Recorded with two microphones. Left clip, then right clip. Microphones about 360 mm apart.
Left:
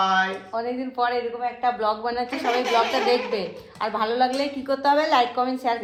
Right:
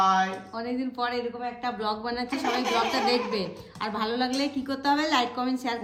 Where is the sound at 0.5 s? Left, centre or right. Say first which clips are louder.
Left 5 dB; centre.